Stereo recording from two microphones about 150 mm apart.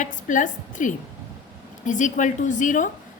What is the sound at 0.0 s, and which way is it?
A woman's voice, 60° left (ahead or behind).